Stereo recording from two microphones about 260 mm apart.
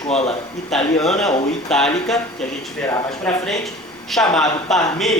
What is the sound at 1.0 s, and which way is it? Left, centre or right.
Speech, centre.